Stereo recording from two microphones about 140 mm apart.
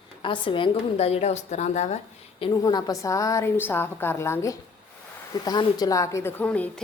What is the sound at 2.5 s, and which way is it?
A woman's voice, 30° left (ahead or behind).